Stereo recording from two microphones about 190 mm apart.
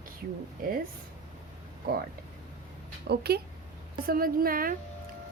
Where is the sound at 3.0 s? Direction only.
55° right (ahead or behind).